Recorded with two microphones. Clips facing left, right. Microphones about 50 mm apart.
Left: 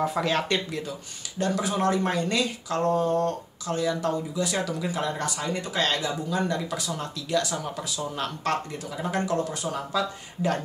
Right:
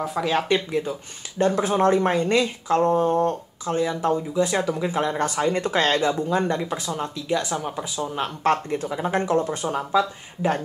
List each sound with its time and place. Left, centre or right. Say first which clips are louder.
0.0 s speech: right 2 dB; centre
0.7 s speech: right 7 dB; right
1.4 s speech: right 6 dB; right